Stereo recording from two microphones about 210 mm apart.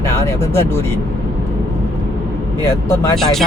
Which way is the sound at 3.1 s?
Centre (ahead or behind).